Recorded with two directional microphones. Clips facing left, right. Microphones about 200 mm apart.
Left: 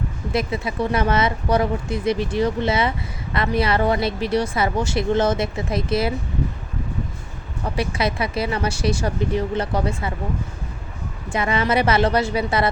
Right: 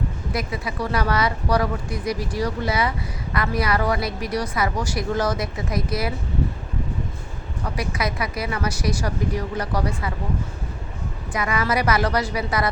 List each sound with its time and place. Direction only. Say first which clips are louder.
0.3 s a woman's voice: left 5 dB; 25° left (ahead or behind)
7.8 s a woman's voice: left 4 dB; 30° left (ahead or behind)
11.3 s a woman's voice: left 3 dB; 25° left (ahead or behind)